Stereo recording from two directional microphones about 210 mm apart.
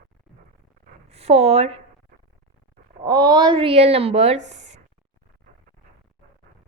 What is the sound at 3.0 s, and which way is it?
A woman's voice, 15° right (ahead or behind).